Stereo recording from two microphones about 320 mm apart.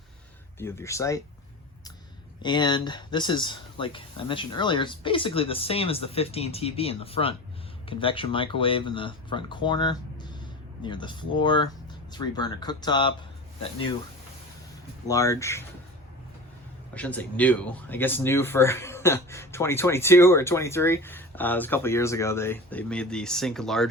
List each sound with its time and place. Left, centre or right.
0.6 s speech: centre
2.4 s speech: centre
15.0 s speech: centre
16.9 s speech: centre